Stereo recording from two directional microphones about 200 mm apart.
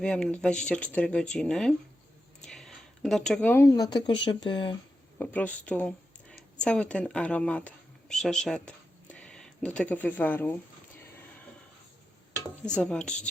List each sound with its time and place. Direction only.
0.0 s speech: 5° left (ahead or behind); by 4.8 s 25° left (ahead or behind)
5.1 s speech: 10° left (ahead or behind)
12.6 s speech: 5° left (ahead or behind)